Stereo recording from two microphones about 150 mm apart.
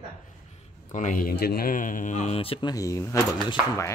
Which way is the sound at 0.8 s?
60° left (ahead or behind).